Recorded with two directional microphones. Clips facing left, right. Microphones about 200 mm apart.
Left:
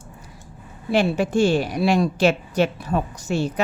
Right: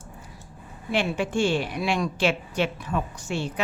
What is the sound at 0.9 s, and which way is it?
A woman's voice, 40° left (ahead or behind).